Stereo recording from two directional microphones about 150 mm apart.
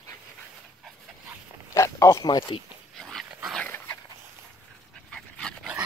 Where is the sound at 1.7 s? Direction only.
20° left (ahead or behind).